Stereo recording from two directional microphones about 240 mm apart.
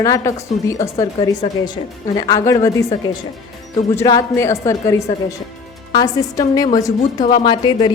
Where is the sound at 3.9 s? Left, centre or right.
Centre.